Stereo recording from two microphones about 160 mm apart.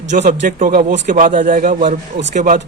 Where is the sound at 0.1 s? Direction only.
55° right (ahead or behind); by 1.0 s 70° right (ahead or behind).